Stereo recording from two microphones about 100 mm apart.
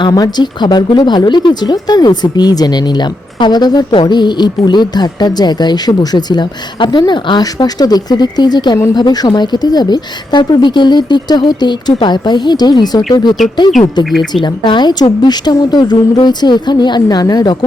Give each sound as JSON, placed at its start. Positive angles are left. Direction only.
{"t": 0.0, "sound": "speech", "side_deg": 45}
{"t": 14.0, "sound": "speech", "side_deg": 0}
{"t": 14.4, "sound": "speech", "side_deg": 50}